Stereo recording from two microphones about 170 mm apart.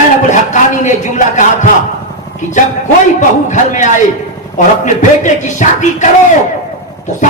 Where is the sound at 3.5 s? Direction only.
45° left (ahead or behind).